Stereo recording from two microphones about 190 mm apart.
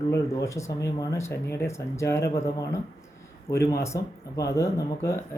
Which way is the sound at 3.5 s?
15° left (ahead or behind).